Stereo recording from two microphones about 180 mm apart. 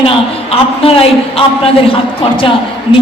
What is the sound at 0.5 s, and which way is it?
A man's voice, 30° left (ahead or behind).